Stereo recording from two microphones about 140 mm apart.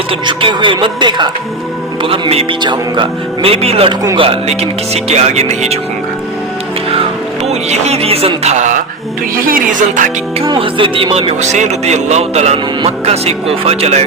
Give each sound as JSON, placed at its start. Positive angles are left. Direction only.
{"t": 0.1, "sound": "speech", "side_deg": -35}
{"t": 7.4, "sound": "speech", "side_deg": -50}
{"t": 9.5, "sound": "music", "side_deg": -70}
{"t": 10.5, "sound": "speech", "side_deg": -40}